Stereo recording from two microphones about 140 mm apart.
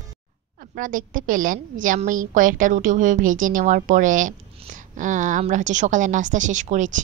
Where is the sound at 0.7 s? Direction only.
75° right (ahead or behind).